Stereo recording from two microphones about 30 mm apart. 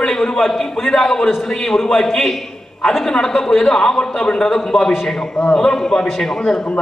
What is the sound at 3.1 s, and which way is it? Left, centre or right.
A man's voice, centre.